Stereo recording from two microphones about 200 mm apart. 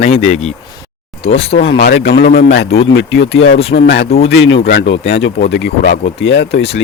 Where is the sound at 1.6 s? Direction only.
60° left (ahead or behind).